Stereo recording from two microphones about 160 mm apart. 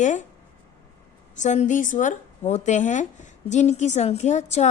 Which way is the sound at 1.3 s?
50° left (ahead or behind).